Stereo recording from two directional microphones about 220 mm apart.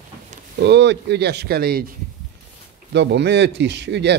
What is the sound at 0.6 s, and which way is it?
Speech, 50° right (ahead or behind).